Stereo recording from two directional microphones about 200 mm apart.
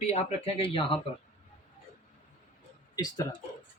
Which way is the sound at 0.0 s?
30° left (ahead or behind).